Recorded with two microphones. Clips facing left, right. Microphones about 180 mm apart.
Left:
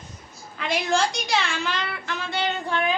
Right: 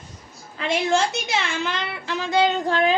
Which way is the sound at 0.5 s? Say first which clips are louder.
Right 3 dB; 25° right (ahead or behind).